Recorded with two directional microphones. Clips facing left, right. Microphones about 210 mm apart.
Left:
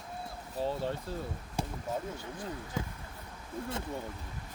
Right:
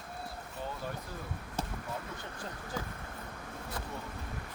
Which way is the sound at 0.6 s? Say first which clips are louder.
Left 7 dB; 30° left (ahead or behind).